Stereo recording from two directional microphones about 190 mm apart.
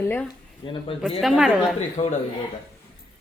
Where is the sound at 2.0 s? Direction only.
40° left (ahead or behind).